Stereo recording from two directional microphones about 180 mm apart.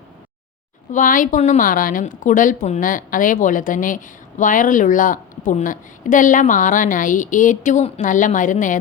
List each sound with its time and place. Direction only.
0.9 s a woman's voice: 45° left (ahead or behind)